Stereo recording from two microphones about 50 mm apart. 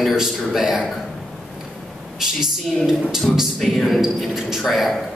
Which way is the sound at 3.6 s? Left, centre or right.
Centre.